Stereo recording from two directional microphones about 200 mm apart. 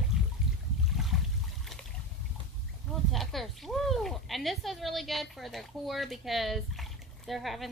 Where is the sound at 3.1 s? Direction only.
Centre (ahead or behind).